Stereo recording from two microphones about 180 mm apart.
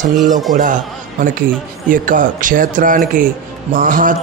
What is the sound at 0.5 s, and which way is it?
Speech, 45° right (ahead or behind).